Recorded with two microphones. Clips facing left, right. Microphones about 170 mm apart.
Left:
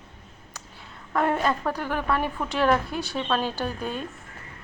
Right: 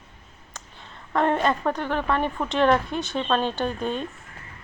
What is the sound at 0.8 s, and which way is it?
A woman's voice, 5° left (ahead or behind).